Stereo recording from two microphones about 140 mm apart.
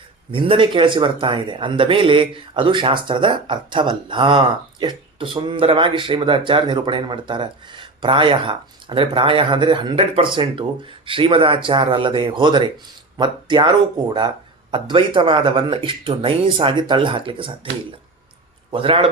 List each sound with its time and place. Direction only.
0.3 s speech: 40° right (ahead or behind)
18.7 s speech: 40° right (ahead or behind)